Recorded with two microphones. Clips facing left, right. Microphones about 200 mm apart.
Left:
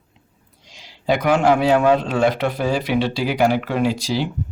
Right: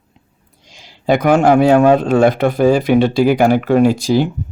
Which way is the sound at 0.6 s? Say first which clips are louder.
Right 4 dB; 50° right (ahead or behind).